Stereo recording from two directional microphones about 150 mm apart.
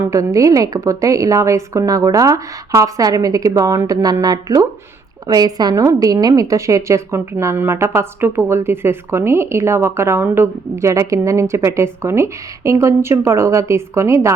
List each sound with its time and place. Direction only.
0.0 s a woman's voice: 20° right (ahead or behind)